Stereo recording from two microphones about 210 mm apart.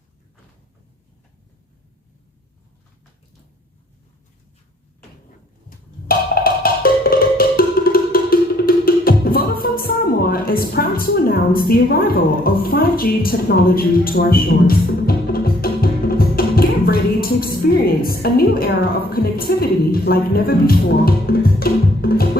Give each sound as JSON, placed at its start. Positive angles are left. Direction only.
{"t": 5.6, "sound": "music", "side_deg": 45}
{"t": 19.1, "sound": "speech", "side_deg": 45}